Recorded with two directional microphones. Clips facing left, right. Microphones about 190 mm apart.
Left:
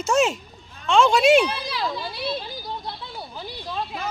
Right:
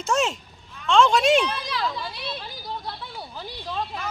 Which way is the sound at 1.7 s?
30° left (ahead or behind).